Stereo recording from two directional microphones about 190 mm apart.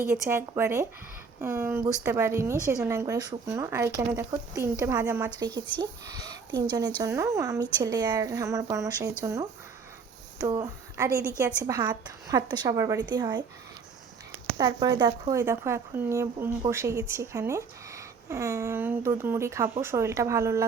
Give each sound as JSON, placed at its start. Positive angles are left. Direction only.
{"t": 0.1, "sound": "a woman's voice", "side_deg": -10}
{"t": 5.8, "sound": "a woman's voice", "side_deg": -20}
{"t": 14.6, "sound": "a woman's voice", "side_deg": -20}